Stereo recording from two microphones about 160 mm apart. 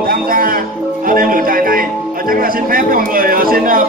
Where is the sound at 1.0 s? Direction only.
60° right (ahead or behind).